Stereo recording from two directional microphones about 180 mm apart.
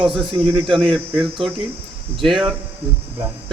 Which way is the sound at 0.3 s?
25° right (ahead or behind).